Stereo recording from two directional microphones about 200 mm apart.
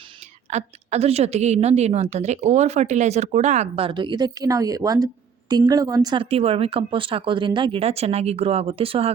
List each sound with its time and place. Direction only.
0.5 s a woman's voice: 30° right (ahead or behind)